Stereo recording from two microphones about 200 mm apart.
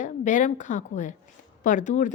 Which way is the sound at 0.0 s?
40° left (ahead or behind).